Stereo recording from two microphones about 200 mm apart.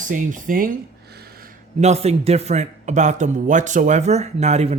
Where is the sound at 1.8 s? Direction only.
30° right (ahead or behind).